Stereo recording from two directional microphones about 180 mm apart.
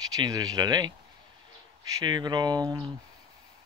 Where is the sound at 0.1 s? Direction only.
20° right (ahead or behind).